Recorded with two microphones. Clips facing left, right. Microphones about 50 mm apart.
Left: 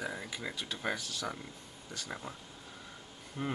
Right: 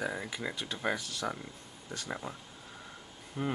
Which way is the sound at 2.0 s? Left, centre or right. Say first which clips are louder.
Right 4 dB; centre.